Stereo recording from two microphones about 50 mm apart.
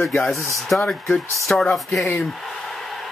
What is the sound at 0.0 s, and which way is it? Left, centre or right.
Speech, centre.